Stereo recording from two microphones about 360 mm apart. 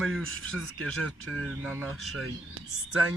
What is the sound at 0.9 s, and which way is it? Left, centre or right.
Speech, centre.